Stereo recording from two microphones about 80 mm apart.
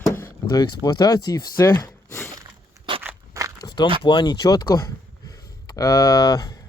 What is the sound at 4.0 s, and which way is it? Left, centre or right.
Speech, left.